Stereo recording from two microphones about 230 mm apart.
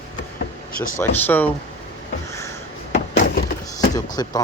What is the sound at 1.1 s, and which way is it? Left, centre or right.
Speech, centre.